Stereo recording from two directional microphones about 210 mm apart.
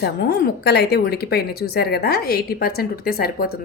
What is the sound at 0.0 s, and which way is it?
Speech, 50° left (ahead or behind).